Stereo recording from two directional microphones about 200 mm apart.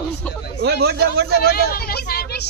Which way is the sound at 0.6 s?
55° right (ahead or behind).